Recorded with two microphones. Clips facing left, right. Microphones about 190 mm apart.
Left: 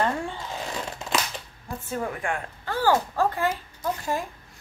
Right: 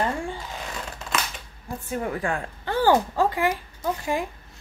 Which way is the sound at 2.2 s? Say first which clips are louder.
Right 2 dB; 35° right (ahead or behind).